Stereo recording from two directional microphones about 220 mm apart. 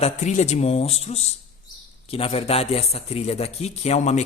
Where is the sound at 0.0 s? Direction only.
30° left (ahead or behind).